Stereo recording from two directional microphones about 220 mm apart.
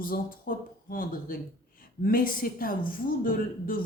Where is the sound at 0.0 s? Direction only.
40° left (ahead or behind).